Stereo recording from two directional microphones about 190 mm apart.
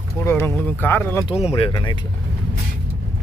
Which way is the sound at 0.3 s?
10° left (ahead or behind).